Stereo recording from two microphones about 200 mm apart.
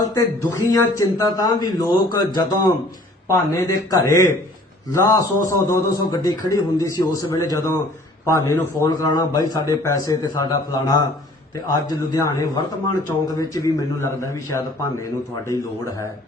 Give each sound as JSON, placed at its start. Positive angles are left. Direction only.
{"t": 0.1, "sound": "a man's voice", "side_deg": 15}
{"t": 15.4, "sound": "a man's voice", "side_deg": 15}